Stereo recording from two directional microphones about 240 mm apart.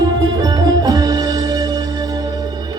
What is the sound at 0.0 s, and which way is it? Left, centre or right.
Music, centre.